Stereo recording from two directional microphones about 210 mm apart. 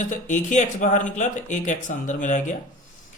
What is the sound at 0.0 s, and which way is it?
Speech, 35° left (ahead or behind).